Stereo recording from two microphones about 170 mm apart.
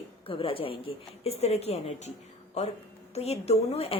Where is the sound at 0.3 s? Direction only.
30° left (ahead or behind).